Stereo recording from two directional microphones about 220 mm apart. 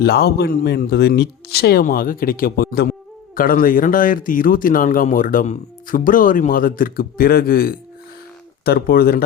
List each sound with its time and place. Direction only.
0.0 s speech: 45° left (ahead or behind)